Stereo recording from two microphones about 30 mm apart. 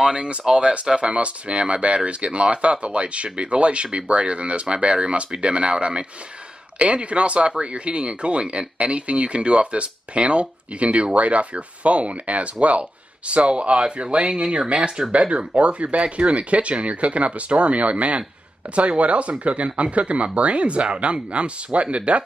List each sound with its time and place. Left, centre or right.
0.1 s speech: right